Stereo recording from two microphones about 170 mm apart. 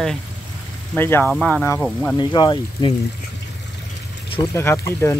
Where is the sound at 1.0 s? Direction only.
10° left (ahead or behind).